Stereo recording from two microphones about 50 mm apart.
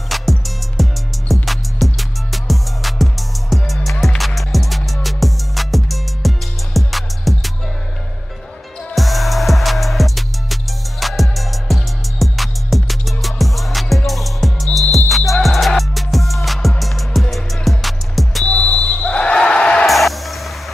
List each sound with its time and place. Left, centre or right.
0.1 s music: centre
8.9 s music: centre
18.4 s basketball bounce: left
19.9 s music: centre